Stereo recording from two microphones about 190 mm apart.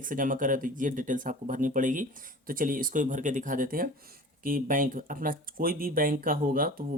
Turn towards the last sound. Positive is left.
turn(degrees=-50)  # may be behind; listen again after turning